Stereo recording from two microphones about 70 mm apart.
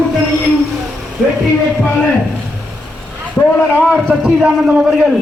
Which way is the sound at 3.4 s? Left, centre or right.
Left.